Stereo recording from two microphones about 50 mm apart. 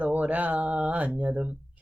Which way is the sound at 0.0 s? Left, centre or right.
Right.